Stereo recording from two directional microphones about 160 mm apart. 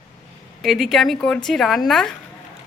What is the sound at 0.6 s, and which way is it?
A woman's voice, centre (ahead or behind).